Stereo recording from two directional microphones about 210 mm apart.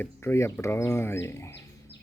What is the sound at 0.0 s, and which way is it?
Speech, 10° left (ahead or behind).